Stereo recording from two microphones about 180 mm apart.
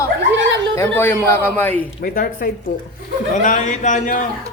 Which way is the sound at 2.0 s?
55° left (ahead or behind).